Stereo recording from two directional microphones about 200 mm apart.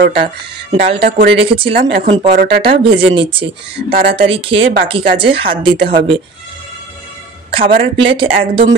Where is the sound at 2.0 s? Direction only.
35° right (ahead or behind).